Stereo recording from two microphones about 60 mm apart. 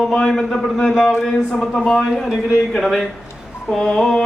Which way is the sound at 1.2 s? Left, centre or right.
Centre.